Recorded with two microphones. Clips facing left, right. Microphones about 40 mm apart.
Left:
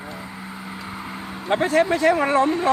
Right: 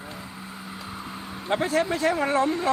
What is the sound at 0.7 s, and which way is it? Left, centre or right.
Speech, left.